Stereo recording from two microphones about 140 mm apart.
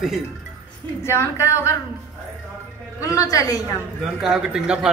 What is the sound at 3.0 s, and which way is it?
Speech, 25° left (ahead or behind).